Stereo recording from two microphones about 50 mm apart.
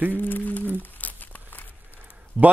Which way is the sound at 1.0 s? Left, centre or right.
Left.